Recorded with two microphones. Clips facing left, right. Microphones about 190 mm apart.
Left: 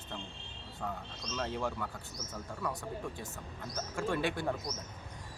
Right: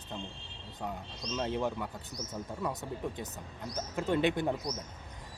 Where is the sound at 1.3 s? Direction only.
20° right (ahead or behind).